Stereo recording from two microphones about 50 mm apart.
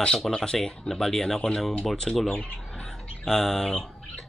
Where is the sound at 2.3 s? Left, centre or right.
Left.